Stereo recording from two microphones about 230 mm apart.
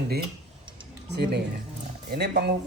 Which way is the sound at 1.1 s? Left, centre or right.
Right.